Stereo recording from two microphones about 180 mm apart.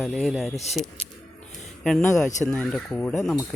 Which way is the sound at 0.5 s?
35° left (ahead or behind).